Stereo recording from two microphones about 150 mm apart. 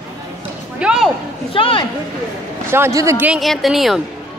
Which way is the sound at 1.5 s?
35° left (ahead or behind).